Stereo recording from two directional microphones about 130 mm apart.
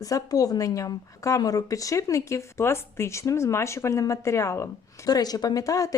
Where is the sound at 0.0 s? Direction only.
25° left (ahead or behind).